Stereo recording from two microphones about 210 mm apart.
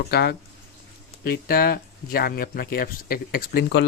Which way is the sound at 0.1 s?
50° left (ahead or behind).